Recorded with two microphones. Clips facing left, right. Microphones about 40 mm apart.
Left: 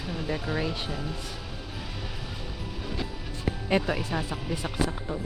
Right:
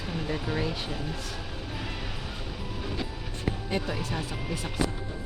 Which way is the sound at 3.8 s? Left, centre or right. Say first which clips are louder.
Left 4 dB; left.